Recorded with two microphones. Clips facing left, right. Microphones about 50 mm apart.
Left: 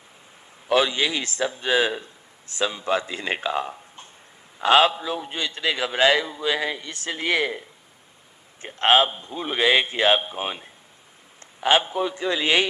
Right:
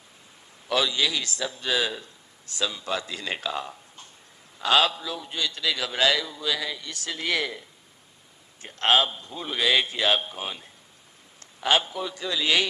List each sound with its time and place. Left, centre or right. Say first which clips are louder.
0.7 s a man's voice: left 4 dB; left
8.6 s a man's voice: left 4 dB; left